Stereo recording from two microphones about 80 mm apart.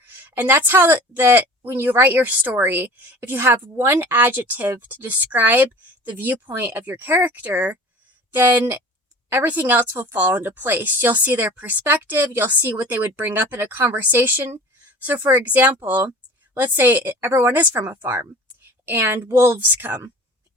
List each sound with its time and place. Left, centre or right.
0.1 s a woman's voice: right